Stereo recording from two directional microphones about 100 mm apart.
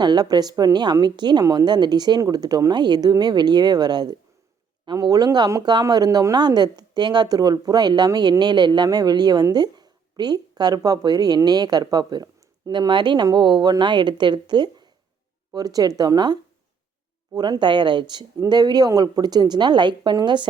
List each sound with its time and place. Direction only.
0.0 s speech: 45° right (ahead or behind)